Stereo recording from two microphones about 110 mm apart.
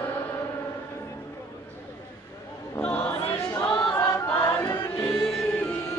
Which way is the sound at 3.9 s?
25° left (ahead or behind).